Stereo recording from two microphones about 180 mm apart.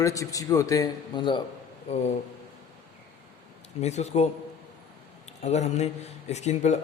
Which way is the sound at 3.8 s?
40° left (ahead or behind).